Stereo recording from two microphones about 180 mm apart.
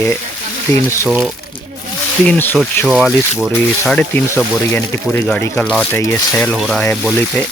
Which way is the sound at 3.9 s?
10° left (ahead or behind).